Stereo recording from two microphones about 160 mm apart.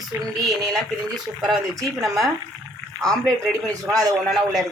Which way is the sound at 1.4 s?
25° right (ahead or behind).